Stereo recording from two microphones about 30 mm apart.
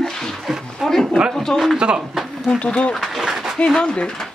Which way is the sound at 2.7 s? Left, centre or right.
Left.